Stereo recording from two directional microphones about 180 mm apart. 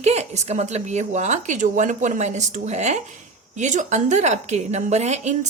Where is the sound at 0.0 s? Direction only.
40° right (ahead or behind).